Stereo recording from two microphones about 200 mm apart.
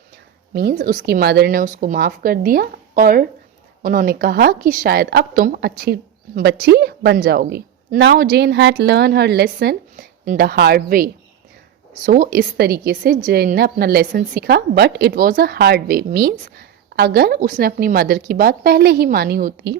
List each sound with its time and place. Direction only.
0.7 s a woman's voice: 45° right (ahead or behind)